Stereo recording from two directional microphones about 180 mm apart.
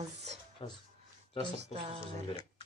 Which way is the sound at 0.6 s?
30° left (ahead or behind).